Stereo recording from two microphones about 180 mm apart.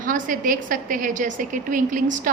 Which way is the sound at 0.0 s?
50° right (ahead or behind).